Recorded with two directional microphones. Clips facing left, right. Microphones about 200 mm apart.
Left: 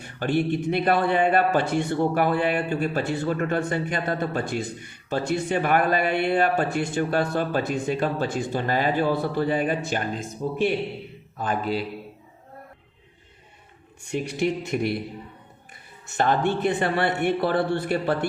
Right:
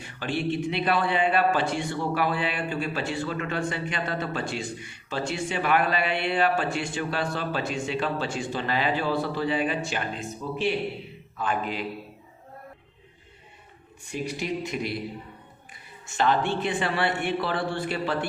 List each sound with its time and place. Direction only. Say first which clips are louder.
0.2 s a man's voice: left 4 dB; 45° left (ahead or behind)
11.3 s a man's voice: left 3 dB; 35° left (ahead or behind)
14.1 s speech: left 5 dB; 60° left (ahead or behind)
16.1 s a man's voice: left 2 dB; 50° left (ahead or behind)